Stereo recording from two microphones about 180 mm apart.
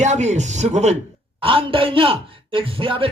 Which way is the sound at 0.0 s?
40° right (ahead or behind).